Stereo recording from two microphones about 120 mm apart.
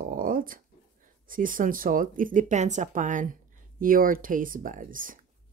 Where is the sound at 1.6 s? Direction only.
90° right.